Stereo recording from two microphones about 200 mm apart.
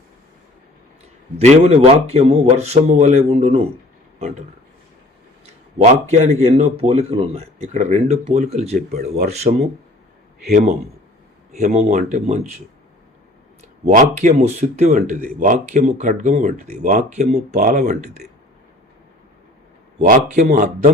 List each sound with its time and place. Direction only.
1.4 s speech: 35° right (ahead or behind)
5.8 s a man's voice: 35° right (ahead or behind)
13.8 s speech: 40° right (ahead or behind)
20.0 s speech: 40° right (ahead or behind)